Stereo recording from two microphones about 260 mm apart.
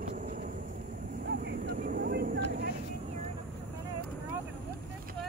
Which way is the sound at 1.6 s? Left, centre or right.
Right.